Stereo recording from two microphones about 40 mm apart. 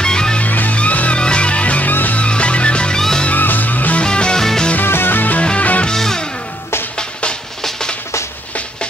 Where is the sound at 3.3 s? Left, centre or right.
Left.